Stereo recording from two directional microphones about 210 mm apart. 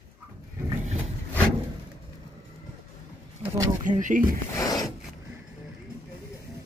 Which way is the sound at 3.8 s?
35° right (ahead or behind).